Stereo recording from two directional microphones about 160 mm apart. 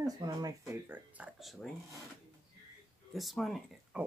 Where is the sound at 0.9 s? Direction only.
5° right (ahead or behind).